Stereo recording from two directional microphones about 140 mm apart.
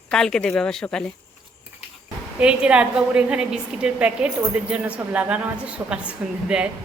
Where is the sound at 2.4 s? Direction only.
5° right (ahead or behind).